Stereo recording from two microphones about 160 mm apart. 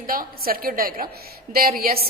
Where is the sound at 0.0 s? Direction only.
65° right (ahead or behind).